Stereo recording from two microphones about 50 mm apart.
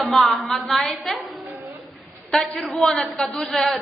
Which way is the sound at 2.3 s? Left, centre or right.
Centre.